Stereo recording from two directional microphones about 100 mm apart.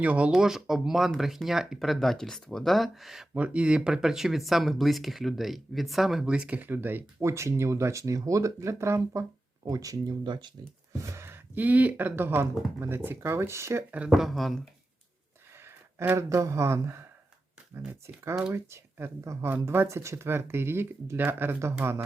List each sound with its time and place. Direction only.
0.0 s speech: 15° right (ahead or behind)
3.3 s speech: 10° right (ahead or behind); by 10.2 s 35° right (ahead or behind)
10.2 s speech: 50° right (ahead or behind)
10.9 s speech: 30° right (ahead or behind)
14.1 s speech: centre (ahead or behind)
15.6 s speech: 25° right (ahead or behind)